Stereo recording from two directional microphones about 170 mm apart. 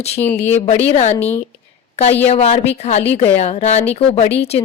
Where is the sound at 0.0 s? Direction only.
40° left (ahead or behind).